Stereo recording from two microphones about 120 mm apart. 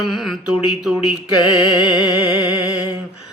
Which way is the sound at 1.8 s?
35° left (ahead or behind).